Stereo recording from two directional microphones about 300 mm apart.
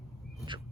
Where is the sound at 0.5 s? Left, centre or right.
Centre.